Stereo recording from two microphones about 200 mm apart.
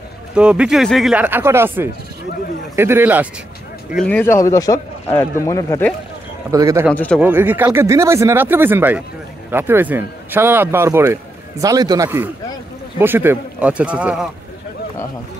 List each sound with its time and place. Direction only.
0.3 s speech: 5° right (ahead or behind)
3.9 s speech: 5° left (ahead or behind)
6.5 s speech: 15° right (ahead or behind)
6.9 s speech: 5° left (ahead or behind)
7.2 s speech: 10° right (ahead or behind)